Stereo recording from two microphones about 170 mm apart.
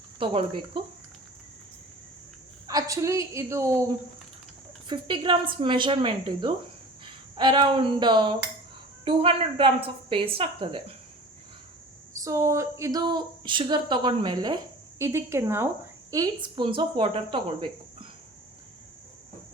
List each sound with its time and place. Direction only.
0.2 s a woman's voice: 30° right (ahead or behind)
2.6 s a woman's voice: 20° right (ahead or behind)
4.9 s a woman's voice: 30° right (ahead or behind)
12.2 s speech: 20° right (ahead or behind)